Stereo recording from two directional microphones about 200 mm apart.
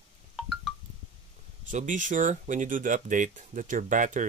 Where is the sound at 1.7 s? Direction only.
40° right (ahead or behind).